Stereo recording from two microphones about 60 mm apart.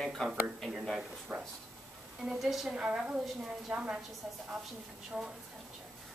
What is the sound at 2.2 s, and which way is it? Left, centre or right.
Speech, centre.